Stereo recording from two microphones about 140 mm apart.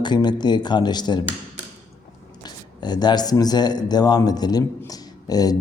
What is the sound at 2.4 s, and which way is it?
Speech, 30° left (ahead or behind).